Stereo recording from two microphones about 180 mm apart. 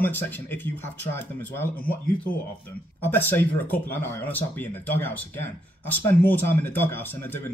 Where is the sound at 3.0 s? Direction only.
10° left (ahead or behind).